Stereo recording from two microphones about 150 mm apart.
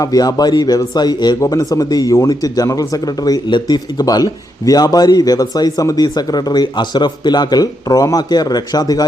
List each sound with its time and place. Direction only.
0.0 s speech: 25° left (ahead or behind)